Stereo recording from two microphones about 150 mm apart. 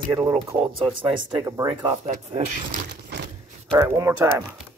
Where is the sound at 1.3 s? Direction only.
20° right (ahead or behind).